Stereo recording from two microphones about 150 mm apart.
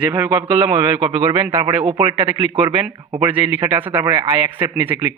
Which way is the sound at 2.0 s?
40° right (ahead or behind).